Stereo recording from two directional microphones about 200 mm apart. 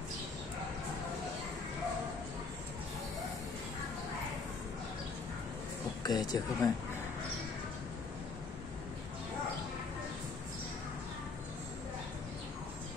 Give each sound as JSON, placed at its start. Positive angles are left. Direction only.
{"t": 6.0, "sound": "speech", "side_deg": 20}